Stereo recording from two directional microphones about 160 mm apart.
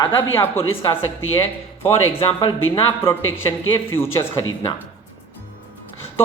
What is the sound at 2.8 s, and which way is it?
Speech, 15° left (ahead or behind).